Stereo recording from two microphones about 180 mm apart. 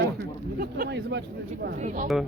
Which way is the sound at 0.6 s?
65° right (ahead or behind).